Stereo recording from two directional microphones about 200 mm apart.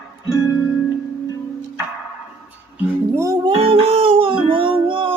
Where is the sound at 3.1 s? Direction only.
15° right (ahead or behind).